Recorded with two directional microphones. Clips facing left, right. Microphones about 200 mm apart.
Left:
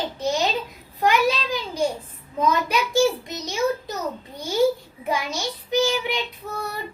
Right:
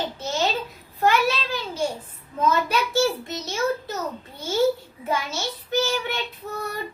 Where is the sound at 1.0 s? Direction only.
15° left (ahead or behind).